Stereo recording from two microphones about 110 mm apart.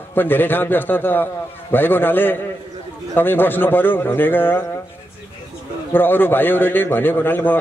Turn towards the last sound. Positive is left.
turn(degrees=20)  # may be behind; listen again after turning